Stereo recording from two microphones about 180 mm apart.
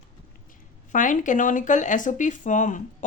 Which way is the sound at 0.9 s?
45° left (ahead or behind).